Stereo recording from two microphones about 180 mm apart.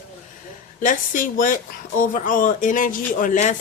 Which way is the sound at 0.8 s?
45° left (ahead or behind).